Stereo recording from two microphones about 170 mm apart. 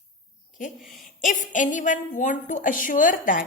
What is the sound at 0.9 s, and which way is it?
A woman's voice, 50° left (ahead or behind).